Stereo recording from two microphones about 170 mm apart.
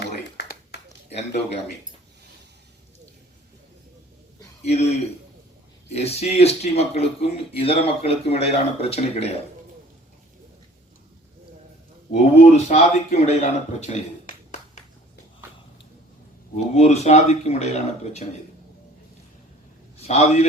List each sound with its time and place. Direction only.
0.3 s a sound: 75° left (ahead or behind)
4.6 s speech: 40° left (ahead or behind)
12.1 s speech: 45° left (ahead or behind)
16.7 s speech: 40° left (ahead or behind)
20.0 s speech: 40° left (ahead or behind)